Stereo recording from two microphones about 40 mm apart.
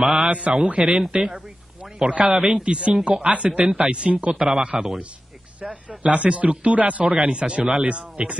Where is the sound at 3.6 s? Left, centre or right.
Centre.